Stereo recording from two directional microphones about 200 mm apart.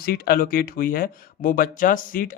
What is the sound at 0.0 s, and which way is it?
Speech, 50° left (ahead or behind).